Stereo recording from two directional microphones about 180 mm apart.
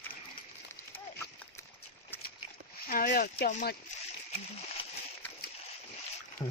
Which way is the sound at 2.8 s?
50° left (ahead or behind).